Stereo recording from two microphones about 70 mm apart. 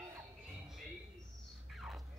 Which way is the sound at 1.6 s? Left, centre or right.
Centre.